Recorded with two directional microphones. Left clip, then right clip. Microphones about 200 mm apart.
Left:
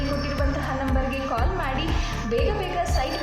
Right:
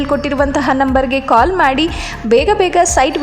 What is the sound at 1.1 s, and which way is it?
A woman's voice, 55° right (ahead or behind).